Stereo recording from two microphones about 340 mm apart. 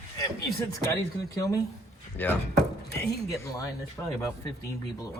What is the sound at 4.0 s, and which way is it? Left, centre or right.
Speech, centre.